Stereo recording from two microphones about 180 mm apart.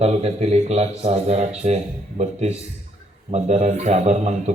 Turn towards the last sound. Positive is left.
turn(degrees=-35)  # may be behind; listen again after turning